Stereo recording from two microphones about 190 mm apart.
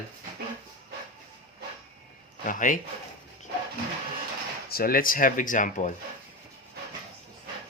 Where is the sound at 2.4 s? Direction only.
45° left (ahead or behind).